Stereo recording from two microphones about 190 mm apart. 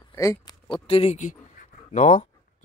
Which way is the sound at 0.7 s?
30° left (ahead or behind).